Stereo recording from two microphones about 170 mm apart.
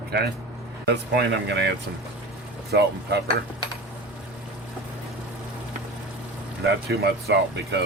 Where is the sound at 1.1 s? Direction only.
85° right.